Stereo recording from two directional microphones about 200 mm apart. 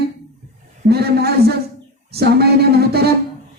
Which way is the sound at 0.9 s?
50° right (ahead or behind).